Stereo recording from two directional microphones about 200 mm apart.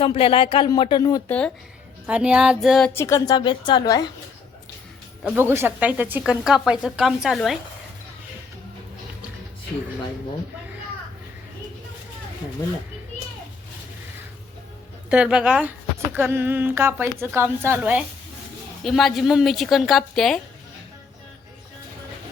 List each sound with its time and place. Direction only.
0.0 s speech: 30° left (ahead or behind)
2.0 s speech: 5° right (ahead or behind)
2.9 s speech: 15° left (ahead or behind)
5.2 s speech: 10° right (ahead or behind)
15.1 s speech: 5° right (ahead or behind)